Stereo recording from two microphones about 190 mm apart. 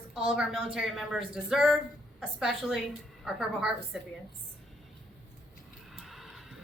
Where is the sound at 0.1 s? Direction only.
5° right (ahead or behind).